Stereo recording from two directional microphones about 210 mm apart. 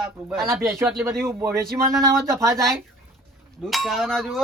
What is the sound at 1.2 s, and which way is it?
Speech, 15° right (ahead or behind).